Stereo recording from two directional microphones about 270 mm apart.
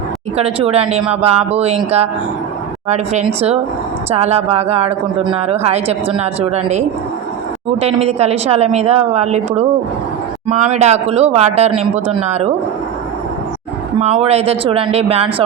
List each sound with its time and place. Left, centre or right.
0.3 s speech: right
7.8 s speech: right
14.0 s speech: right